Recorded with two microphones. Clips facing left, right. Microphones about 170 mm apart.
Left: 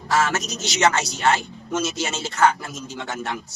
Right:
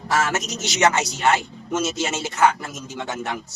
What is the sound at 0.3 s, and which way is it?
Speech, 20° right (ahead or behind).